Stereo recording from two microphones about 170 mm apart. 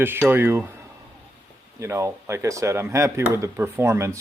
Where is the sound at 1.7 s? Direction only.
15° right (ahead or behind).